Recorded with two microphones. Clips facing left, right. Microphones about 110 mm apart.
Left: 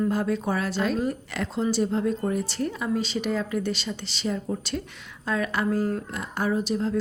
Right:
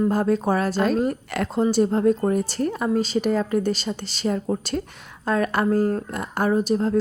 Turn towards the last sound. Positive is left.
turn(degrees=-45)  # may be behind; listen again after turning